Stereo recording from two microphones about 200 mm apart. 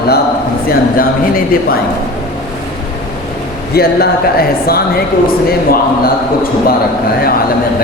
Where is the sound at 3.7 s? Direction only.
50° left (ahead or behind).